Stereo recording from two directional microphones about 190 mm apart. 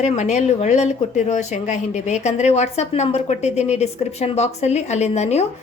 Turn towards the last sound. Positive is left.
turn(degrees=35)  # may be behind; listen again after turning